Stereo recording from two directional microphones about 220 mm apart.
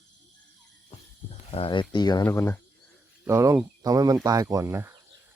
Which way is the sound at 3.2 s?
15° right (ahead or behind).